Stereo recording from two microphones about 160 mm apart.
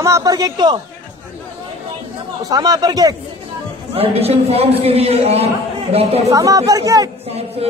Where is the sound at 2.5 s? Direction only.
25° right (ahead or behind).